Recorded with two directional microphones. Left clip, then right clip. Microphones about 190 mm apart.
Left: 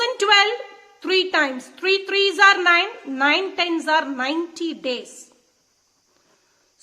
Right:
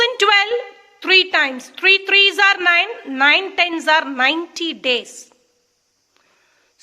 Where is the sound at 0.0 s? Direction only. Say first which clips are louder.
Right 2 dB; 20° right (ahead or behind).